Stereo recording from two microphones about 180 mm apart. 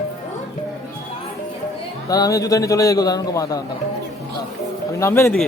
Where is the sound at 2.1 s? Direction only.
20° left (ahead or behind).